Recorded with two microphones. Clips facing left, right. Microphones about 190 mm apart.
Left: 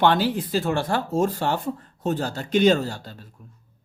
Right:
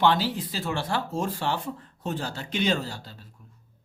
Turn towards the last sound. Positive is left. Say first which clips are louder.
# left 8 dB
turn(degrees=45)  # may be behind; listen again after turning